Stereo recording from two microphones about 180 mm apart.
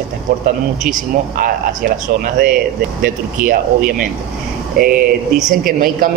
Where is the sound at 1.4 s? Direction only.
50° right (ahead or behind).